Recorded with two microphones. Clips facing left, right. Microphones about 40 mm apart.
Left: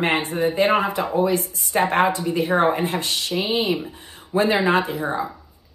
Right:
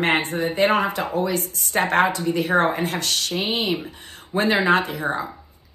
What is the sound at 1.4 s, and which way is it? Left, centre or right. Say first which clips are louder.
Speech: left 1 dB; right.